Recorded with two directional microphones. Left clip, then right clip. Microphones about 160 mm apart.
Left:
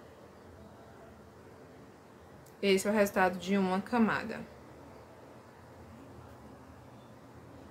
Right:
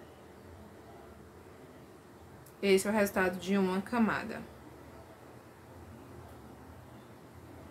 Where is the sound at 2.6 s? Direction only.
5° left (ahead or behind).